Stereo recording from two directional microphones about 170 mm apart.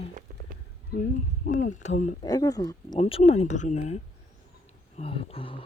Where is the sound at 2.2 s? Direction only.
20° left (ahead or behind).